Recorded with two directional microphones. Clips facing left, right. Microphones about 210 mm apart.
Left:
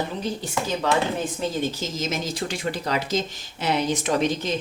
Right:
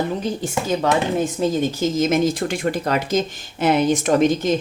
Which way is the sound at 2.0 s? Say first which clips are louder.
Right 11 dB; 55° right (ahead or behind).